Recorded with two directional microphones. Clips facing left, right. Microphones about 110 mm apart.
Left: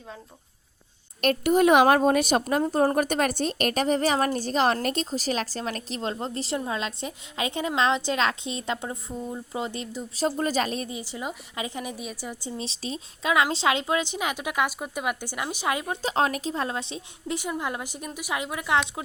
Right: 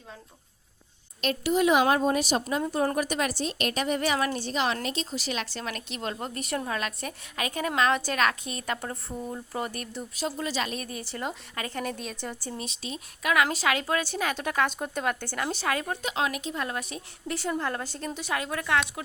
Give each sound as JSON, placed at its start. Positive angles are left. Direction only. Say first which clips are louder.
{"t": 1.2, "sound": "a woman's voice", "louder": "left 4 dB", "side_deg": 50}
{"t": 10.2, "sound": "a woman's voice", "louder": "left 6 dB", "side_deg": 40}
{"t": 10.8, "sound": "a woman's voice", "louder": "left 1 dB", "side_deg": 15}
{"t": 12.5, "sound": "a woman's voice", "louder": "left 3 dB", "side_deg": 30}
{"t": 16.0, "sound": "a woman's voice", "louder": "left 4 dB", "side_deg": 35}